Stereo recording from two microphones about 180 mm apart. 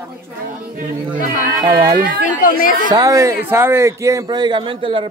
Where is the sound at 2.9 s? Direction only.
20° right (ahead or behind).